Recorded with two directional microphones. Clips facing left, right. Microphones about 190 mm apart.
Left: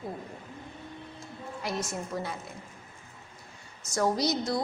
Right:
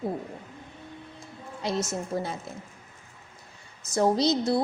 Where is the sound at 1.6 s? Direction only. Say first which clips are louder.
Right 5 dB; 25° right (ahead or behind).